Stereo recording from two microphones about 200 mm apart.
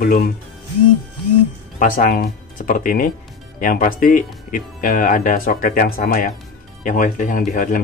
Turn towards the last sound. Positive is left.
turn(degrees=40)  # may be behind; listen again after turning